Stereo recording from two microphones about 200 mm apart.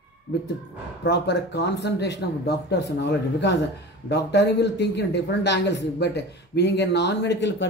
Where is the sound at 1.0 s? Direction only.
60° left (ahead or behind).